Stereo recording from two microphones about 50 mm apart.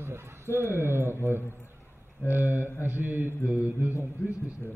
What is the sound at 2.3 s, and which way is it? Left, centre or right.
Mantra, right.